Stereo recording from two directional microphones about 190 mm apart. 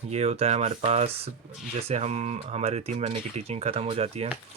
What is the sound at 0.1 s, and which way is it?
Speech, 35° right (ahead or behind).